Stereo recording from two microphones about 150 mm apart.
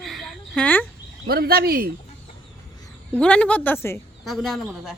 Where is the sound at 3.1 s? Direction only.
10° left (ahead or behind).